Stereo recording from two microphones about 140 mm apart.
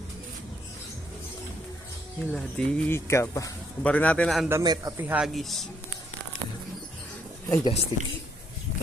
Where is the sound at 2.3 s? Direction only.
5° left (ahead or behind).